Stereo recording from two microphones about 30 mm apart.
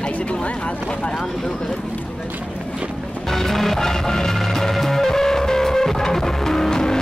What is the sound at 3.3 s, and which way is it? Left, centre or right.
Music, centre.